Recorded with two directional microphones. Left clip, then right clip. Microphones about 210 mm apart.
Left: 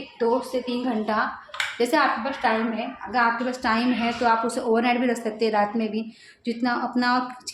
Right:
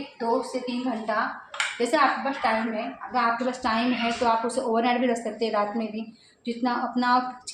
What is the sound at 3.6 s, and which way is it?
Speech, 35° left (ahead or behind).